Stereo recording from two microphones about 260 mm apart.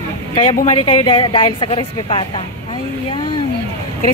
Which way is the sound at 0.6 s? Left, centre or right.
Left.